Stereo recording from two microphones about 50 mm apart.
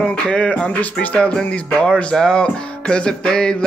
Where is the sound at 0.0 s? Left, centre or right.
Left.